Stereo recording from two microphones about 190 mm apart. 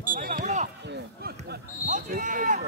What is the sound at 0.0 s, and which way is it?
Basketball bounce, 45° right (ahead or behind).